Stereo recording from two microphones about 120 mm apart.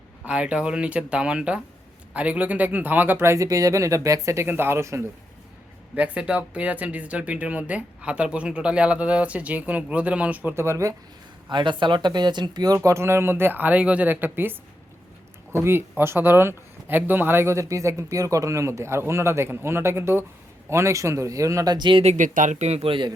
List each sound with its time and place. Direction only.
0.3 s speech: 10° right (ahead or behind)
5.9 s speech: 10° right (ahead or behind); by 10.9 s 25° right (ahead or behind)
11.4 s speech: 40° right (ahead or behind)
22.0 s speech: 90° right; by 23.1 s 45° right (ahead or behind)